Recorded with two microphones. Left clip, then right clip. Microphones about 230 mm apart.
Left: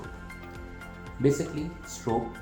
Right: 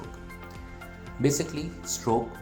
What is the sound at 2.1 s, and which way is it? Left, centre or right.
Speech, right.